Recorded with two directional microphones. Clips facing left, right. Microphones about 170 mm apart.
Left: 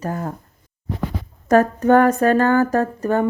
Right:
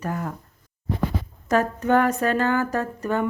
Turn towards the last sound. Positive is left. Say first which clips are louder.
# left 6 dB
turn(degrees=40)  # may be behind; listen again after turning